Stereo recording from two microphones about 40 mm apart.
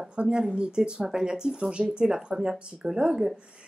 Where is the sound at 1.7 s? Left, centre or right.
Right.